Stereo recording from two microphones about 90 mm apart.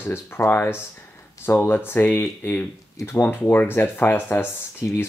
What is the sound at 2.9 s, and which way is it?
Speech, 35° left (ahead or behind).